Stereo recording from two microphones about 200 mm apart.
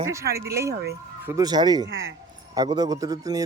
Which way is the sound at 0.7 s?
55° right (ahead or behind).